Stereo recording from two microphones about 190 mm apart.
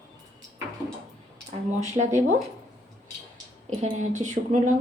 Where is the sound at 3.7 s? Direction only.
40° right (ahead or behind).